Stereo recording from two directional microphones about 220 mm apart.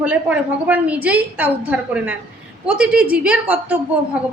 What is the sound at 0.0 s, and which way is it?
A woman's voice, 5° right (ahead or behind).